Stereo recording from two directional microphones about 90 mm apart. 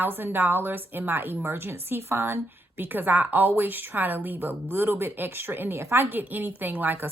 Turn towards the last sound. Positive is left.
turn(degrees=-20)  # may be behind; listen again after turning